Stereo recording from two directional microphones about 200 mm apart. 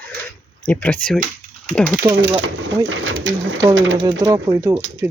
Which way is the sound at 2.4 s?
70° right (ahead or behind).